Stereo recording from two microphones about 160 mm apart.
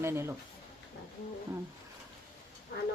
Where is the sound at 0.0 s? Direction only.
15° right (ahead or behind).